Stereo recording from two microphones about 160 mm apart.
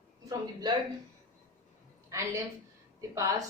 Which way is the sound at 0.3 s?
25° right (ahead or behind).